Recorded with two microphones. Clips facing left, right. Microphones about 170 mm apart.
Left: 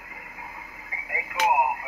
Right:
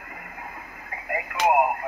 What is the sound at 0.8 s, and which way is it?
Radio, 55° right (ahead or behind).